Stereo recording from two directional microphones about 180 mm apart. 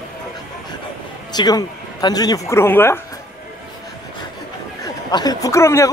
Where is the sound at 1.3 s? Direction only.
20° left (ahead or behind).